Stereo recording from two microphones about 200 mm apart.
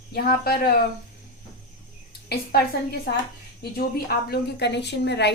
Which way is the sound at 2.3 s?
55° left (ahead or behind).